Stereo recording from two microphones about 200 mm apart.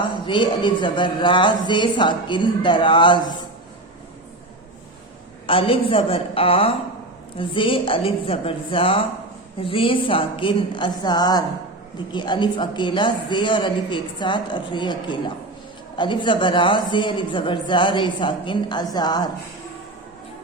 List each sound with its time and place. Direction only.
0.3 s a woman's voice: 25° left (ahead or behind)
5.5 s a woman's voice: 25° left (ahead or behind)